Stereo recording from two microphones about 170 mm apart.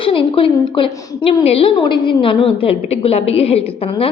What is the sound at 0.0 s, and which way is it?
A woman's voice, 30° left (ahead or behind).